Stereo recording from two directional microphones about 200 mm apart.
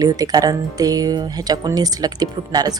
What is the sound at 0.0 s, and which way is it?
Speech, 20° right (ahead or behind).